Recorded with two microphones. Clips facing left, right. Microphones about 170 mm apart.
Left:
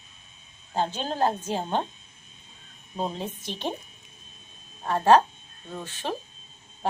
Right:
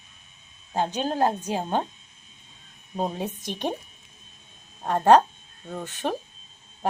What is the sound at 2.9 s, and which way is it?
Speech, 10° right (ahead or behind).